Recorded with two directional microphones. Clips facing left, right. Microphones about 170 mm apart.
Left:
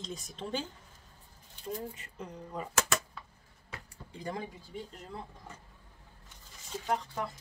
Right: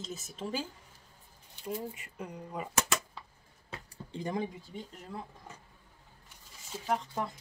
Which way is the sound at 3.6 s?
30° right (ahead or behind).